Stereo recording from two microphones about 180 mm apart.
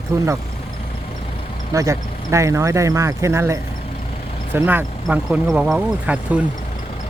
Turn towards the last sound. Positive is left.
turn(degrees=-5)  # may be behind; listen again after turning